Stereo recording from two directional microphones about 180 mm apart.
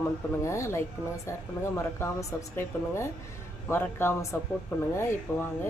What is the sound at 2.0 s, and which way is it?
Speech, 15° left (ahead or behind).